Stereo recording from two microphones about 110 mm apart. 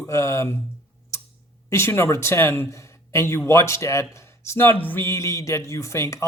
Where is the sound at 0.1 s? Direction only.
25° left (ahead or behind).